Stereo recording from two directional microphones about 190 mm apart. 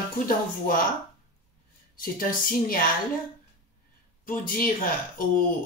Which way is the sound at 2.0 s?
50° left (ahead or behind).